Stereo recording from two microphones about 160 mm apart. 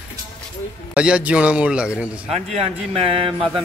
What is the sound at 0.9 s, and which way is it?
A man's voice, 5° right (ahead or behind).